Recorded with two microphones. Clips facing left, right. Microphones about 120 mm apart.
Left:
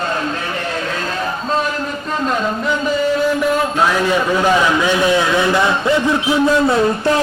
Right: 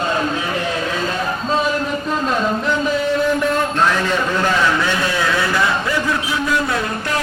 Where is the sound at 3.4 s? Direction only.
5° left (ahead or behind).